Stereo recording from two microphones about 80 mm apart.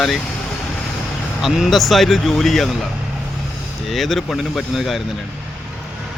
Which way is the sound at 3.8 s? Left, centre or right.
Centre.